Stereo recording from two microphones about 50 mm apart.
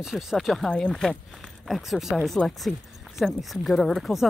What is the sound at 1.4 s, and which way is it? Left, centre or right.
Speech, centre.